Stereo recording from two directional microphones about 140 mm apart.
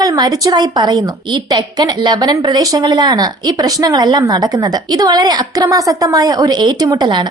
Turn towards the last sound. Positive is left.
turn(degrees=-30)  # may be behind; listen again after turning